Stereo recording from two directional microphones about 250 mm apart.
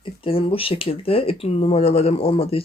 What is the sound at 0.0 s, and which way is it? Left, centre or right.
Speech, left.